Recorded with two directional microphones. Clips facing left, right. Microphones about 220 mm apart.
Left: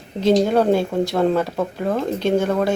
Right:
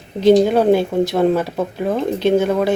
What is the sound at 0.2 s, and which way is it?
Speech, centre (ahead or behind).